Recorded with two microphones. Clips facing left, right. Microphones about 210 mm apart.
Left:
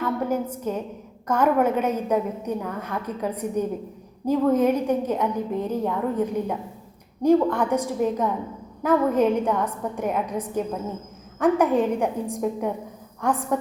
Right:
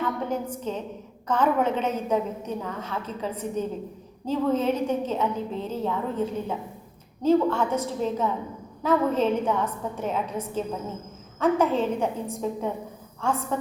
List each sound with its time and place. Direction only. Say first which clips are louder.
0.0 s a woman's voice: left 3 dB; 10° left (ahead or behind)